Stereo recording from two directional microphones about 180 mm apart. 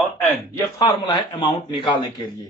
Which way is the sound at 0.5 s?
20° left (ahead or behind).